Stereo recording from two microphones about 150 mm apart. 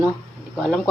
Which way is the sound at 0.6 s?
5° left (ahead or behind).